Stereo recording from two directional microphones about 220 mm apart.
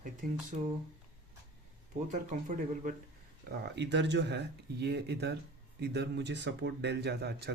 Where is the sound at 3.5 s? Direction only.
50° right (ahead or behind).